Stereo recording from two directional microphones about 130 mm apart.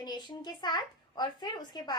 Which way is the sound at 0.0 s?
35° left (ahead or behind).